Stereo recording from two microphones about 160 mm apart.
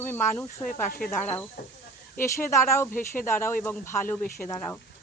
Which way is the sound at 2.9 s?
55° left (ahead or behind).